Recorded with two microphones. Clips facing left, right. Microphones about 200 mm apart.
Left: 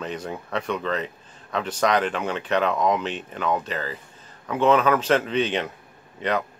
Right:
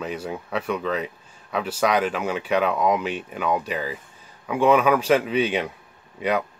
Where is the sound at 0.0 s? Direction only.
5° right (ahead or behind).